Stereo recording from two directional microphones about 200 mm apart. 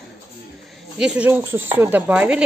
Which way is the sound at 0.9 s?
5° right (ahead or behind).